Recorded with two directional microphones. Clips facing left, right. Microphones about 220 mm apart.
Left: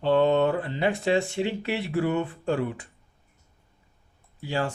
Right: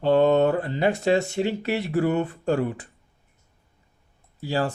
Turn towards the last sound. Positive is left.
turn(degrees=-35)  # may be behind; listen again after turning